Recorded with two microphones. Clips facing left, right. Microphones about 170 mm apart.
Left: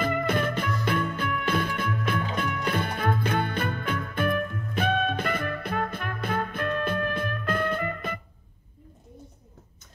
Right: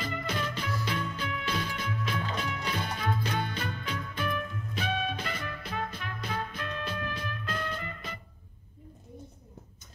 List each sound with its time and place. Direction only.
0.0 s music: 55° left (ahead or behind)